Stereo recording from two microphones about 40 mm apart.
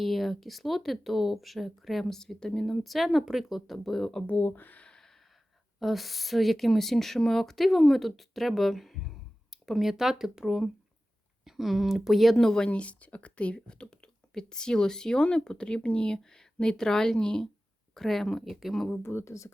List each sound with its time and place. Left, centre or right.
0.0 s speech: centre
3.8 s speech: centre
4.3 s speech: left
4.5 s speech: left
5.8 s speech: centre
12.5 s speech: left; by 18.9 s centre